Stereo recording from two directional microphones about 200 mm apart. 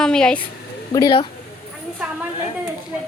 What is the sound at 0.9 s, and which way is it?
Speech, 20° left (ahead or behind).